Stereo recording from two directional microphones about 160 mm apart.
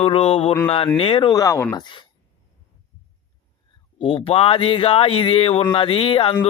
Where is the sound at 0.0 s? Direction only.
35° left (ahead or behind).